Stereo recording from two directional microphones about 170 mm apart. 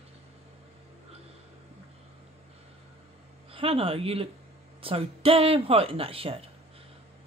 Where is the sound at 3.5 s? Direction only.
35° right (ahead or behind).